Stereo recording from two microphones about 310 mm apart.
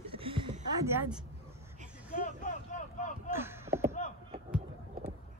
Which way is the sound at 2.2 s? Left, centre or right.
Left.